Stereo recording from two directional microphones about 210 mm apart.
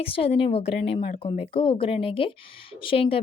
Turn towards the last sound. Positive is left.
turn(degrees=25)  # may be behind; listen again after turning